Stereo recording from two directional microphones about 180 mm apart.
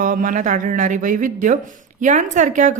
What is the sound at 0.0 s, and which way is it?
A woman's voice, 50° right (ahead or behind).